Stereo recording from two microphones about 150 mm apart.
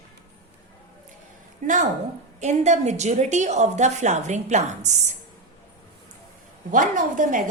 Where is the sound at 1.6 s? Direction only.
60° right (ahead or behind).